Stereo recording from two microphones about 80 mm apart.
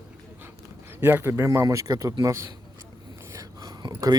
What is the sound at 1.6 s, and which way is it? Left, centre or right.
Speech, right.